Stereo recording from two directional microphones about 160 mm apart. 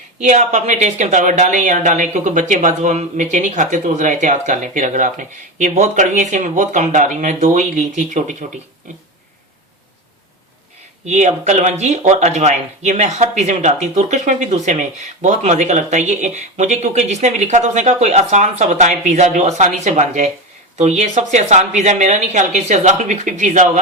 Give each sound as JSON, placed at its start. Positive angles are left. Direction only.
{"t": 0.2, "sound": "speech", "side_deg": -45}
{"t": 11.0, "sound": "speech", "side_deg": -45}